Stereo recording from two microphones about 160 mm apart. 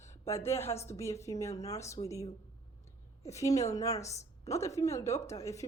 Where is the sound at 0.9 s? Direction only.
20° left (ahead or behind).